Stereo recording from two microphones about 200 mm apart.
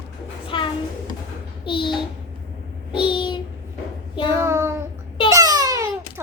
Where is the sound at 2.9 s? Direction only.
25° left (ahead or behind).